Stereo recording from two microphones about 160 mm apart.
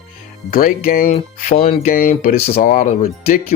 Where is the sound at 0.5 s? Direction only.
65° left (ahead or behind).